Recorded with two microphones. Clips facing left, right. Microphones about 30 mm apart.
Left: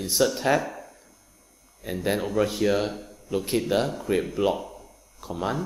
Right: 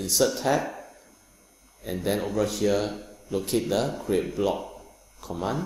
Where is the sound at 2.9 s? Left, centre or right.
Centre.